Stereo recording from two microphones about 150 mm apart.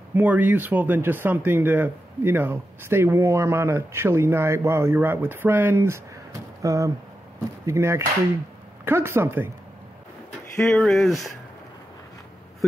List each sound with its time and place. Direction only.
0.1 s speech: 10° right (ahead or behind)
10.6 s speech: 5° left (ahead or behind)